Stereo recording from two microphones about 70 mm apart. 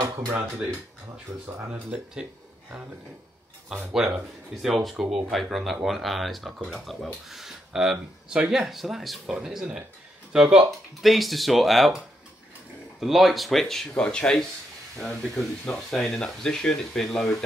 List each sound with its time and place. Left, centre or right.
0.0 s speech: right
1.7 s speech: centre
4.0 s speech: centre
13.0 s speech: centre